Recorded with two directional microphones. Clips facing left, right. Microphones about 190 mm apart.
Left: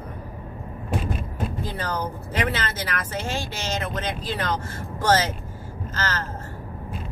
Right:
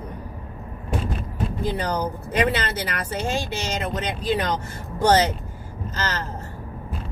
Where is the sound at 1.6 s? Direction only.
15° right (ahead or behind).